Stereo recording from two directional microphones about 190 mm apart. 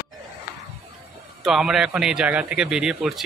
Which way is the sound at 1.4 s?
Centre (ahead or behind).